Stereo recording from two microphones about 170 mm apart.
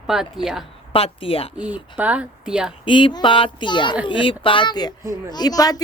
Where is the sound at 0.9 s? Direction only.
35° left (ahead or behind).